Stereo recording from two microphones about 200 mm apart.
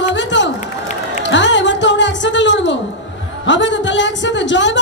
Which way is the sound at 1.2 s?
65° left (ahead or behind).